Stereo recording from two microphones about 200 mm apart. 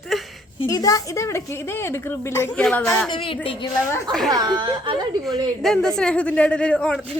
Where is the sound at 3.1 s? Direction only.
25° left (ahead or behind).